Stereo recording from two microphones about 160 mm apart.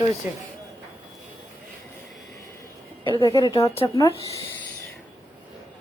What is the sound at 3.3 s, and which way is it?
Speech, 25° left (ahead or behind).